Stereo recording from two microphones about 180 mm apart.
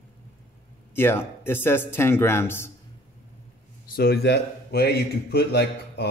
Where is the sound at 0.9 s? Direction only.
10° left (ahead or behind).